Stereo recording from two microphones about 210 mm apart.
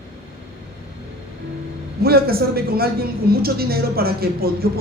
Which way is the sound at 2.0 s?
45° right (ahead or behind).